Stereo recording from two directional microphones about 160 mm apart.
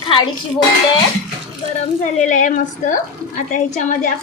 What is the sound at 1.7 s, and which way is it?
A woman's voice, 50° left (ahead or behind).